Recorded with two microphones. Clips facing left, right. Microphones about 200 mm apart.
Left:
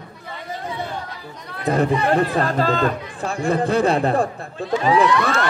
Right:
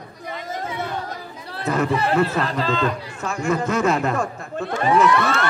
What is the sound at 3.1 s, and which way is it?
A man's voice, 35° left (ahead or behind).